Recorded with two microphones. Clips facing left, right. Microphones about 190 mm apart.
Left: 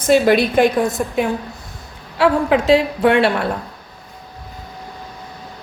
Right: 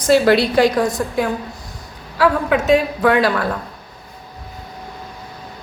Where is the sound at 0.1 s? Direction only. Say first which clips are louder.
Even; 20° left (ahead or behind).